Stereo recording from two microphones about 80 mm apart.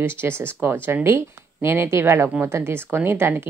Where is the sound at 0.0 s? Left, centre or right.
Right.